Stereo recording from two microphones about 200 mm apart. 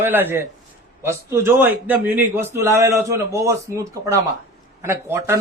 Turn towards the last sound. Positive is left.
turn(degrees=-10)  # may be behind; listen again after turning